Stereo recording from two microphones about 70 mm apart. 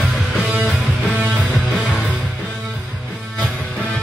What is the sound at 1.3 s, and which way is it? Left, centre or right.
Music, centre.